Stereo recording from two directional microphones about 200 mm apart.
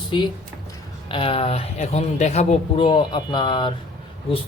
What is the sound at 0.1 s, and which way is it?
Speech, 25° left (ahead or behind).